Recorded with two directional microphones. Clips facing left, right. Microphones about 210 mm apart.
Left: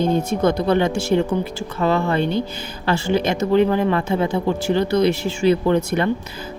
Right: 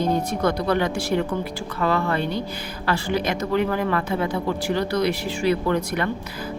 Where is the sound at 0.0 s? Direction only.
25° left (ahead or behind).